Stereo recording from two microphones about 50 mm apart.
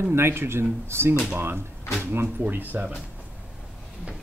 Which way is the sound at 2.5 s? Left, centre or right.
Right.